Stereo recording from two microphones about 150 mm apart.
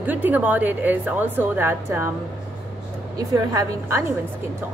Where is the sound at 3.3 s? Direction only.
20° right (ahead or behind).